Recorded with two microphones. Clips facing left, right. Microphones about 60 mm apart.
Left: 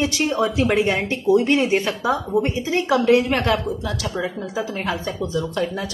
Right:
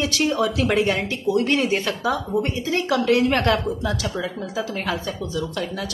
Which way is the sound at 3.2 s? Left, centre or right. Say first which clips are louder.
Right 1 dB; centre.